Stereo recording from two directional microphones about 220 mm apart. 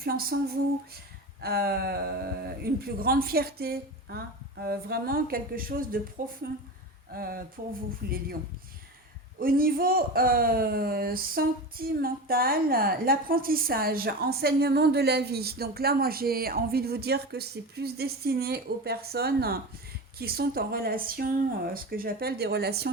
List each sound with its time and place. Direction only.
0.0 s speech: 45° right (ahead or behind)
9.4 s speech: 40° right (ahead or behind)